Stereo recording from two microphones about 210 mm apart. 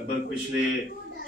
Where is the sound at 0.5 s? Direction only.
60° right (ahead or behind).